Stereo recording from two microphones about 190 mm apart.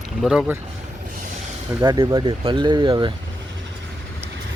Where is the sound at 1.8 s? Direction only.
20° right (ahead or behind).